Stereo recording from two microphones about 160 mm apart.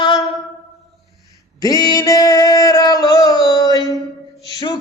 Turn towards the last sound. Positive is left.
turn(degrees=25)  # may be behind; listen again after turning